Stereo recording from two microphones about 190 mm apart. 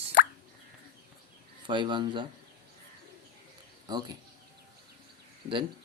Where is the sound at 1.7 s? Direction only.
25° right (ahead or behind).